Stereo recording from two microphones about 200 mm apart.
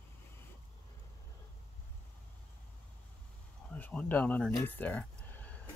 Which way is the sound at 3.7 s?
5° left (ahead or behind).